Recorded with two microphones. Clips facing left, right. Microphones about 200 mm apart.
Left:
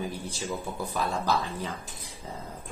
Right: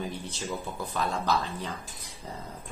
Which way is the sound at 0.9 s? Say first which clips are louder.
Even; 10° left (ahead or behind).